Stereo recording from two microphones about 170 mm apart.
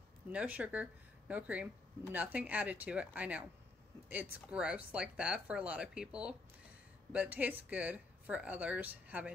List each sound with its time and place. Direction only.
0.3 s speech: 5° right (ahead or behind)